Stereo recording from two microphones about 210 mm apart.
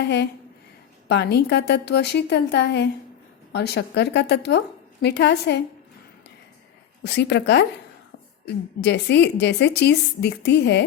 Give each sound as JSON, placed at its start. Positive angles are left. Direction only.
{"t": 0.0, "sound": "a woman's voice", "side_deg": 55}
{"t": 7.0, "sound": "a woman's voice", "side_deg": 55}
{"t": 8.8, "sound": "a woman's voice", "side_deg": 55}